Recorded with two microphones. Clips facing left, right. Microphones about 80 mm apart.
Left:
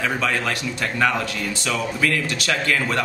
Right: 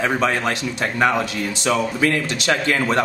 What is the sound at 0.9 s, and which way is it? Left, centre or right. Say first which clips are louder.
A man's voice: right 3 dB; right.